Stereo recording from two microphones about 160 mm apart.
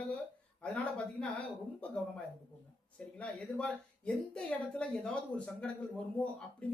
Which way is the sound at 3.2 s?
10° left (ahead or behind).